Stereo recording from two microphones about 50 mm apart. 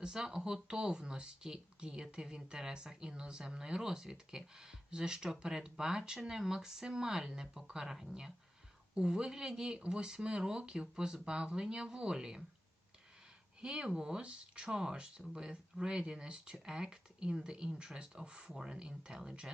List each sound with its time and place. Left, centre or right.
0.0 s speech: centre
13.6 s speech: centre